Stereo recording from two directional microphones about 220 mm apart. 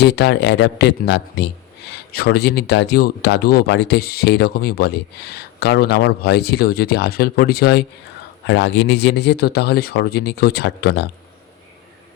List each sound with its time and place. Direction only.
0.0 s a man's voice: 50° left (ahead or behind)